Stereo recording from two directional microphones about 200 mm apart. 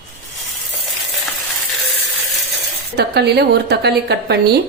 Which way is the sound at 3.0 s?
55° right (ahead or behind).